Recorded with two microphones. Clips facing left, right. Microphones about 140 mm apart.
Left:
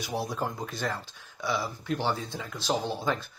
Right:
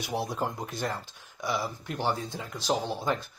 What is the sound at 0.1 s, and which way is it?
Speech, 20° right (ahead or behind).